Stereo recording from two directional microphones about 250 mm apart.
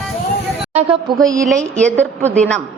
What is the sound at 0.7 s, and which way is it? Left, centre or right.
Speech, right.